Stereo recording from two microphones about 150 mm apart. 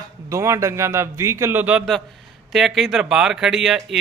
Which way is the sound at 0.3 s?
20° right (ahead or behind).